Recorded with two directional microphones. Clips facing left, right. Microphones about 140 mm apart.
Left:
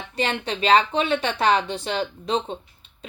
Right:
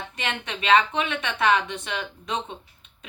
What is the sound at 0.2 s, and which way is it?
Speech, 35° left (ahead or behind).